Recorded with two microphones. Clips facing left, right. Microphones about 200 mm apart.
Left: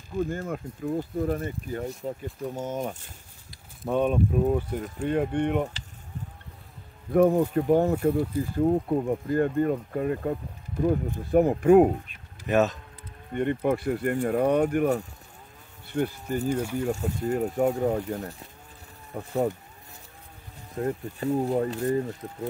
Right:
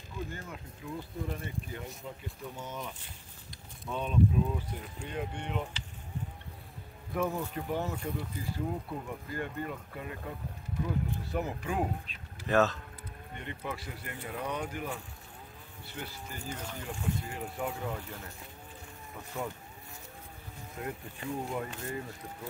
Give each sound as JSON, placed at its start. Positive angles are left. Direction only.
{"t": 0.3, "sound": "speech", "side_deg": 45}
{"t": 7.1, "sound": "speech", "side_deg": 55}
{"t": 12.4, "sound": "cattle", "side_deg": 20}
{"t": 13.3, "sound": "speech", "side_deg": 55}
{"t": 15.9, "sound": "speech", "side_deg": 50}
{"t": 16.4, "sound": "speech", "side_deg": 10}
{"t": 16.8, "sound": "speech", "side_deg": 40}
{"t": 19.1, "sound": "speech", "side_deg": 55}
{"t": 20.7, "sound": "speech", "side_deg": 40}